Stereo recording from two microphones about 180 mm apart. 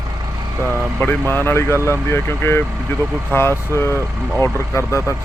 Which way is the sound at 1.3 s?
10° left (ahead or behind).